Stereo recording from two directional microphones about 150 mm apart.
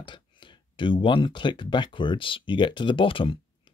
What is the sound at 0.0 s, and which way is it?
Speech, 35° left (ahead or behind).